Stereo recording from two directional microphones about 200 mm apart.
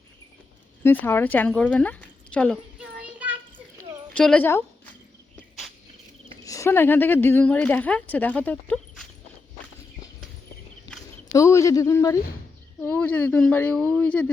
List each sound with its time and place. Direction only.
0.9 s speech: 10° left (ahead or behind)
2.9 s child singing: 5° right (ahead or behind)
4.1 s speech: 5° left (ahead or behind)
6.4 s speech: 15° left (ahead or behind)
11.3 s speech: 15° left (ahead or behind)